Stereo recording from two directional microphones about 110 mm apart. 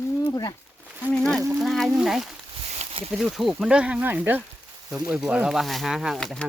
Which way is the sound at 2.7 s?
65° right (ahead or behind).